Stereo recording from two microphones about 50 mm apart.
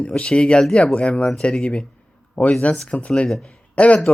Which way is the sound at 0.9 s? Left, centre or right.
Left.